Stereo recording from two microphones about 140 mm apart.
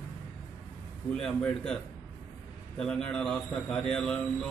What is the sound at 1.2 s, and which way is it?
Speech, 5° left (ahead or behind).